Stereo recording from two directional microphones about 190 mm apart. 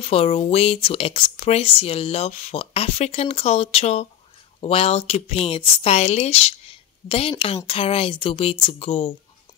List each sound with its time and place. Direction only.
0.0 s speech: 30° left (ahead or behind)